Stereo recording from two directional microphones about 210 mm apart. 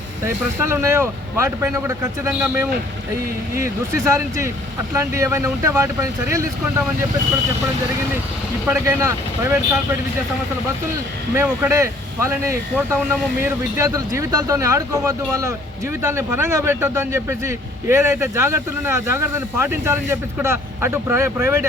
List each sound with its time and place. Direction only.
0.3 s speech: 10° right (ahead or behind)
4.0 s speech: 15° right (ahead or behind)
8.6 s speech: 15° right (ahead or behind)
11.3 s speech: 15° right (ahead or behind)